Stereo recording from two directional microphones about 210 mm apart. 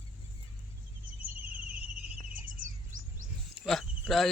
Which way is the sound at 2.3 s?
40° right (ahead or behind).